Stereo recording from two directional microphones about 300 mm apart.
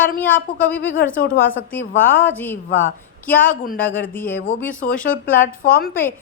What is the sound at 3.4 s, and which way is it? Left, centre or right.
Speech, left.